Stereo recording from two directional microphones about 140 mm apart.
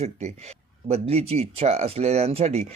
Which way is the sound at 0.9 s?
45° right (ahead or behind).